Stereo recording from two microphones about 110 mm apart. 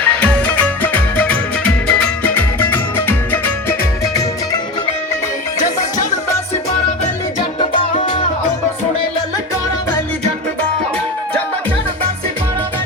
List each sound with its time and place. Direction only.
0.0 s music: 10° left (ahead or behind)